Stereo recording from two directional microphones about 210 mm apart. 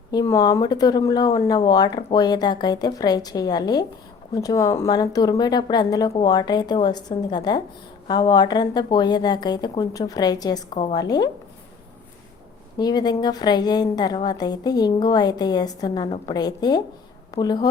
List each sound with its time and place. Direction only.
0.1 s a woman's voice: 15° left (ahead or behind)
12.8 s a woman's voice: 20° left (ahead or behind)